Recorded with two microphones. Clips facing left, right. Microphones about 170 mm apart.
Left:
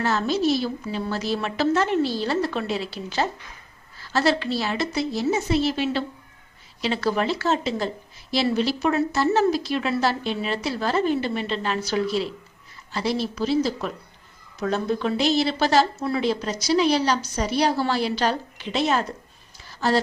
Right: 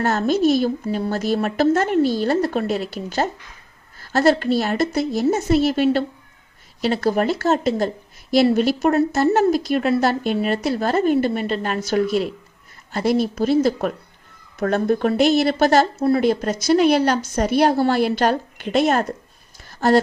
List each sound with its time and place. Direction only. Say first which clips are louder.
0.0 s a woman's voice: right 4 dB; 50° right (ahead or behind)
16.0 s speech: right 8 dB; 35° right (ahead or behind)
16.2 s a woman's voice: right 5 dB; 50° right (ahead or behind)
19.6 s a sound: right 6 dB; 50° right (ahead or behind)